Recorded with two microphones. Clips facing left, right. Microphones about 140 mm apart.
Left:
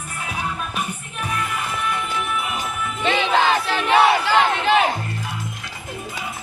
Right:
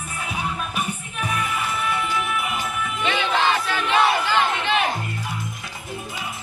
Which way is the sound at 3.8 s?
80° left.